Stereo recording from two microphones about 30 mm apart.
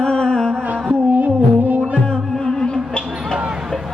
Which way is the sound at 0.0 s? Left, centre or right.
Left.